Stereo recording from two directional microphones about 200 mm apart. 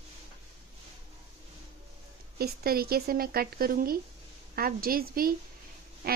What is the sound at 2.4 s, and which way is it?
Speech, 50° right (ahead or behind).